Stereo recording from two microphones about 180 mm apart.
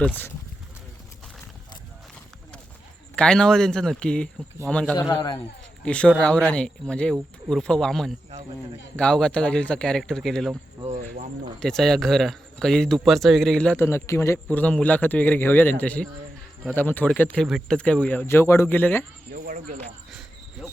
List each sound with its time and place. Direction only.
0.0 s speech: 10° left (ahead or behind)
3.2 s a man's voice: 5° left (ahead or behind)
4.9 s a man's voice: 20° left (ahead or behind)
5.8 s a man's voice: 5° left (ahead or behind)
10.8 s speech: 30° right (ahead or behind)
11.6 s a man's voice: centre (ahead or behind)
19.3 s speech: 45° right (ahead or behind)
20.6 s insect: 5° right (ahead or behind)